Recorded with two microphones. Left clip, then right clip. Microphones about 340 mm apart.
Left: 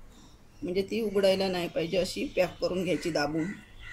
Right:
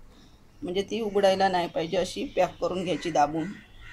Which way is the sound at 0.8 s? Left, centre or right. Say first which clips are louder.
Right 2 dB; right.